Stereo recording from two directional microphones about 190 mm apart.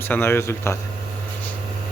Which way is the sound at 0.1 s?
10° left (ahead or behind).